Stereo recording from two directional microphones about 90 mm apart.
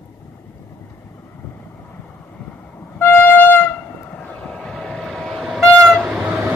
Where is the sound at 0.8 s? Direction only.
30° left (ahead or behind); by 5.3 s centre (ahead or behind).